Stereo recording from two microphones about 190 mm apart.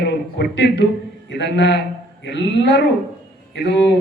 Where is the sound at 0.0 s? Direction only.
65° left (ahead or behind).